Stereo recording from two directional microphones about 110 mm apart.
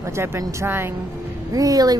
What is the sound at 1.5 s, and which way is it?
Speech, 35° right (ahead or behind).